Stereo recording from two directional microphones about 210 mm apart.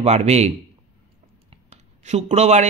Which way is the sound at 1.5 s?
30° right (ahead or behind).